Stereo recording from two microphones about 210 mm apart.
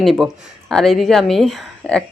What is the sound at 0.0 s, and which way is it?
A woman's voice, centre (ahead or behind).